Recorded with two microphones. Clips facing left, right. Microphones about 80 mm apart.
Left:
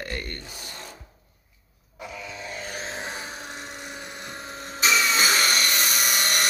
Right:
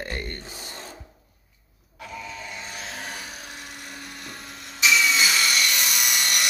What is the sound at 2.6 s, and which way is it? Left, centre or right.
Vehicle, left.